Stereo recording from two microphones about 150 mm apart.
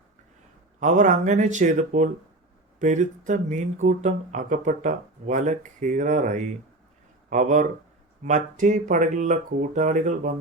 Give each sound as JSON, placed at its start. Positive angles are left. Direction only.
{"t": 0.8, "sound": "speech", "side_deg": -55}